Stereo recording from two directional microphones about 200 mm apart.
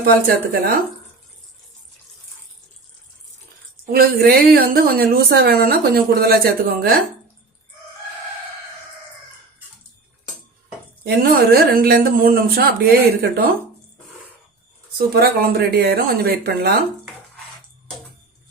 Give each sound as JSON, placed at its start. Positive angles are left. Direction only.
{"t": 0.0, "sound": "a woman's voice", "side_deg": -50}
{"t": 3.9, "sound": "a woman's voice", "side_deg": -50}
{"t": 11.0, "sound": "a woman's voice", "side_deg": -50}
{"t": 14.9, "sound": "a woman's voice", "side_deg": -50}